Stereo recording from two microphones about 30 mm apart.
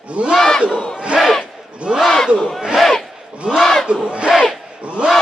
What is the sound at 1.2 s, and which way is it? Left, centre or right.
Speech, centre.